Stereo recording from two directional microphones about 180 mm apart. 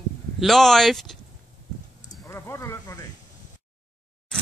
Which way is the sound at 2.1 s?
15° left (ahead or behind).